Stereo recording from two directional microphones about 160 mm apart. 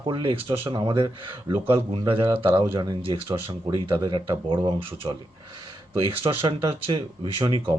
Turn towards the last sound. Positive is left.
turn(degrees=-30)  # may be behind; listen again after turning